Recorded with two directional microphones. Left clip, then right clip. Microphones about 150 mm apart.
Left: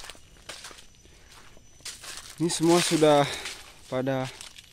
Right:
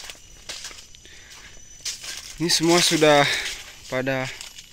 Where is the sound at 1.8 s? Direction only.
5° right (ahead or behind).